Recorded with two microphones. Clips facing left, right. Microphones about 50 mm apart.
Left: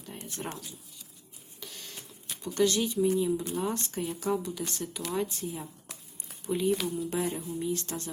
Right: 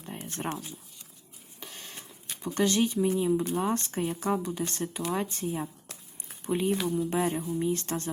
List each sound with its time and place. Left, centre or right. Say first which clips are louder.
0.3 s speech: right 5 dB; right
1.6 s printer: right 1 dB; right
2.6 s speech: right 1 dB; right